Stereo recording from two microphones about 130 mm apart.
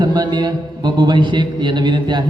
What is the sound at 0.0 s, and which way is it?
A man's voice, 35° right (ahead or behind).